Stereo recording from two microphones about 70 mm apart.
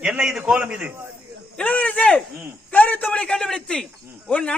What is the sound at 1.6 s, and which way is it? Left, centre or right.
A man's voice, centre.